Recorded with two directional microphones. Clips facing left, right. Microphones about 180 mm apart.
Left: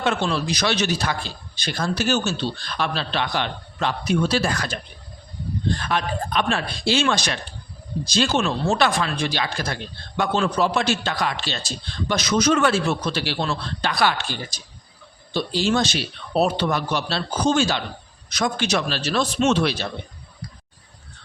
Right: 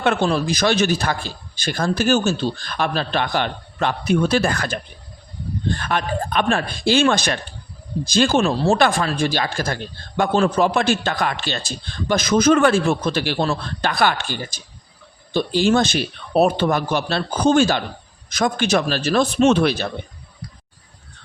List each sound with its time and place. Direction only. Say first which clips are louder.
0.0 s a man's voice: right 4 dB; 55° right (ahead or behind)
5.8 s a man's voice: right 2 dB; 50° right (ahead or behind)
8.4 s speech: right 4 dB; 35° right (ahead or behind)
8.8 s a man's voice: right 3 dB; 45° right (ahead or behind)